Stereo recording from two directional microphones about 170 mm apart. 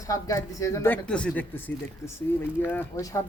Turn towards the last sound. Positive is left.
turn(degrees=20)  # may be behind; listen again after turning